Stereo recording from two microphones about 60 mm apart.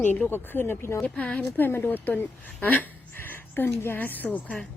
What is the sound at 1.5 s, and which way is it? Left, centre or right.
A woman's voice, left.